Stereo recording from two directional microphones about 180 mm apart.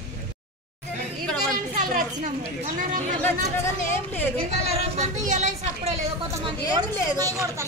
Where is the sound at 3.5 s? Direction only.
15° left (ahead or behind).